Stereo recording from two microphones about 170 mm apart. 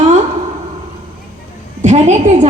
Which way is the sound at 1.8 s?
40° right (ahead or behind).